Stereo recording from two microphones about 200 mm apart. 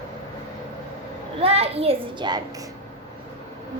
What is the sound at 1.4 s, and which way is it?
A child's voice, 30° right (ahead or behind).